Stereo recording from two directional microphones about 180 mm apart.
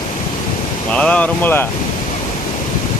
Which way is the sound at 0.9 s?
5° left (ahead or behind).